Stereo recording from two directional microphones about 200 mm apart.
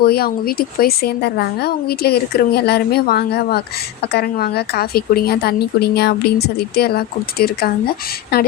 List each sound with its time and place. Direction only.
0.0 s a woman's voice: 50° left (ahead or behind)